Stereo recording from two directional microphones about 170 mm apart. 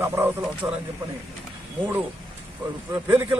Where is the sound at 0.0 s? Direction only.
15° right (ahead or behind).